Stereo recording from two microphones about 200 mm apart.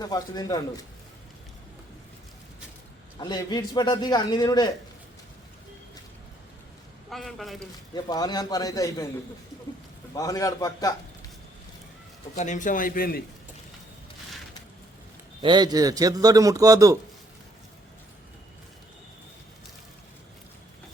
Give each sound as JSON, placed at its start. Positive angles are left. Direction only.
{"t": 0.0, "sound": "a man's voice", "side_deg": 20}
{"t": 3.2, "sound": "a man's voice", "side_deg": 20}
{"t": 7.1, "sound": "speech", "side_deg": 0}
{"t": 7.9, "sound": "a man's voice", "side_deg": 20}
{"t": 10.2, "sound": "a man's voice", "side_deg": 15}
{"t": 12.4, "sound": "a man's voice", "side_deg": 40}
{"t": 15.4, "sound": "a man's voice", "side_deg": -25}